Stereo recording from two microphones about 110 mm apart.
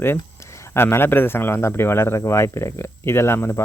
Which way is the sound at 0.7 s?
20° left (ahead or behind).